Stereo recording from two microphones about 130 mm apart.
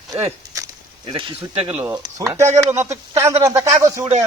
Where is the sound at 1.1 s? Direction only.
45° right (ahead or behind).